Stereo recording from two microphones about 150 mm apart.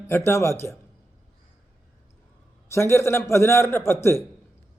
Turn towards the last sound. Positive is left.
turn(degrees=15)  # may be behind; listen again after turning